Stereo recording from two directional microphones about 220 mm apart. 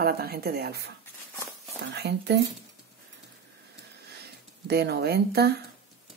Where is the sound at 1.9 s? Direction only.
50° right (ahead or behind).